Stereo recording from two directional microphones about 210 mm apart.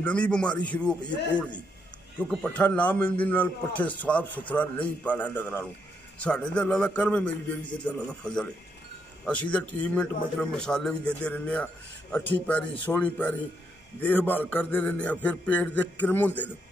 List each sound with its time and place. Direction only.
0.0 s a man's voice: 5° left (ahead or behind)
2.1 s a man's voice: 5° left (ahead or behind)